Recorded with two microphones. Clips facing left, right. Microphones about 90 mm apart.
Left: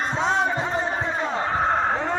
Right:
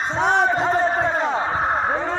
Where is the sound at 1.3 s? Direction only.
20° right (ahead or behind).